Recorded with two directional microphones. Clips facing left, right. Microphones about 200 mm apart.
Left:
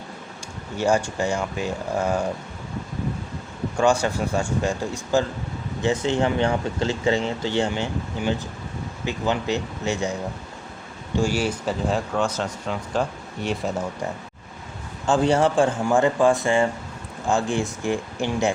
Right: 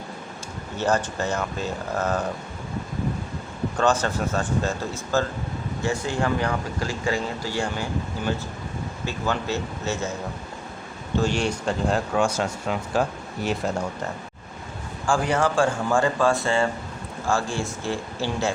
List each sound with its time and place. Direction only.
0.8 s speech: 10° left (ahead or behind)
3.8 s speech: 10° left (ahead or behind)
11.2 s speech: 5° left (ahead or behind)
12.1 s speech: 10° right (ahead or behind)
15.0 s speech: 25° left (ahead or behind)